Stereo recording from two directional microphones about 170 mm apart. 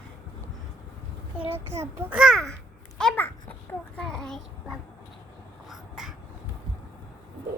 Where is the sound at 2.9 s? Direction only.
5° left (ahead or behind).